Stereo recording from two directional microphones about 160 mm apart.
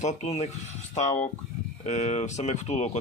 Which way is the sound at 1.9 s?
45° left (ahead or behind).